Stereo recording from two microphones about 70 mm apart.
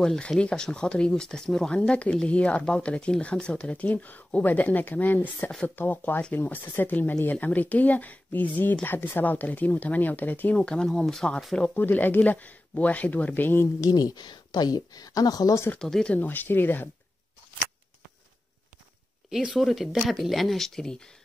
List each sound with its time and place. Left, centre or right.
0.0 s speech: centre
11.8 s speech: left
13.7 s speech: left
15.8 s speech: centre
16.2 s speech: left
19.5 s speech: centre